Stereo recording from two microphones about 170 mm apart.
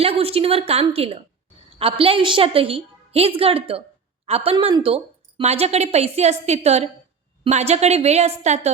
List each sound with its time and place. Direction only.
0.0 s a woman's voice: 35° right (ahead or behind)